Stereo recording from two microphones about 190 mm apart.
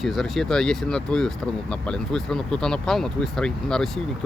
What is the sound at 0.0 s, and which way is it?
Speech, centre (ahead or behind).